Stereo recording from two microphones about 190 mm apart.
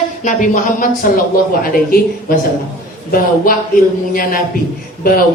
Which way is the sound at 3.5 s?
45° left (ahead or behind).